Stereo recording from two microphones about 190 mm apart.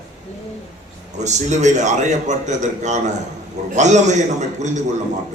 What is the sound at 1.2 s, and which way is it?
A man's voice, 40° right (ahead or behind).